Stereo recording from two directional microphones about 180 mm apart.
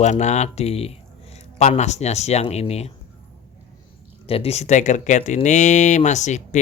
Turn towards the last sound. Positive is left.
turn(degrees=40)  # may be behind; listen again after turning